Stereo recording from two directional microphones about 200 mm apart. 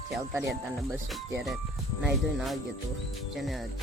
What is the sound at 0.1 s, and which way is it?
Music, centre (ahead or behind).